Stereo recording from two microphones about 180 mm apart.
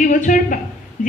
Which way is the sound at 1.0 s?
45° left (ahead or behind).